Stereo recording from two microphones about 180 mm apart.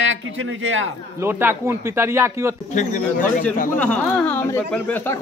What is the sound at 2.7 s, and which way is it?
Speech, 45° left (ahead or behind).